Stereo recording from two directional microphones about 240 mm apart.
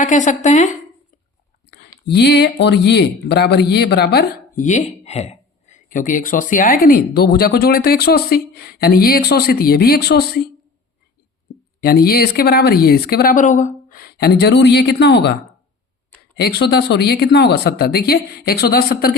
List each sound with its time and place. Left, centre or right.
0.0 s speech: left
1.7 s speech: left
11.8 s speech: left
16.4 s speech: left